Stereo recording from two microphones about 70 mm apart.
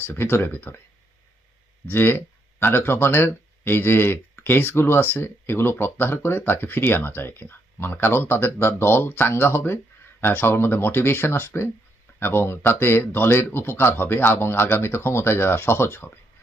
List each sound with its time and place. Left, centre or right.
0.0 s speech: left
1.9 s speech: left